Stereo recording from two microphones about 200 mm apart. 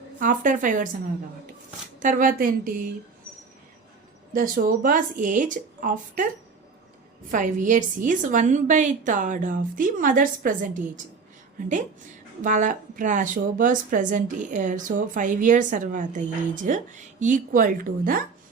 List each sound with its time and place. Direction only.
0.2 s a woman's voice: 40° right (ahead or behind)
2.0 s a woman's voice: 40° right (ahead or behind)
4.3 s a woman's voice: 45° right (ahead or behind)
7.3 s a woman's voice: 40° right (ahead or behind)
12.4 s a woman's voice: 40° right (ahead or behind)